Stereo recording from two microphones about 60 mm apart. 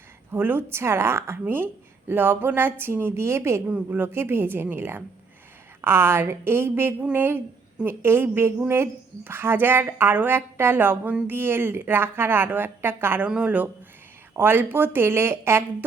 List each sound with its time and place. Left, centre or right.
0.3 s a woman's voice: right
13.2 s speech: right
14.3 s speech: right